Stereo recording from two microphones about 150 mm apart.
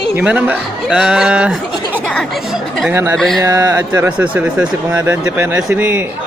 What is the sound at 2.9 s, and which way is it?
Speech, 15° right (ahead or behind).